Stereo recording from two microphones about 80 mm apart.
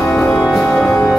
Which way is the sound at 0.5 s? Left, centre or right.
Centre.